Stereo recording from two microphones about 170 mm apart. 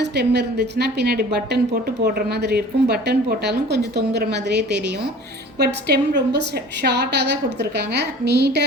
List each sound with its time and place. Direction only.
0.0 s a woman's voice: 80° right